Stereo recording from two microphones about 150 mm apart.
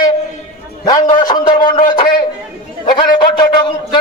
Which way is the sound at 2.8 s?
30° left (ahead or behind).